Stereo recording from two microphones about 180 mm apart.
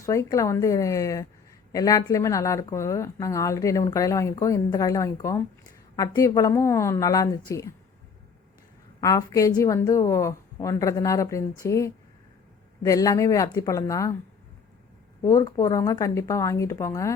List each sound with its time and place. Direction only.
0.0 s speech: 15° left (ahead or behind)
9.0 s speech: 20° left (ahead or behind)
15.2 s speech: 15° left (ahead or behind)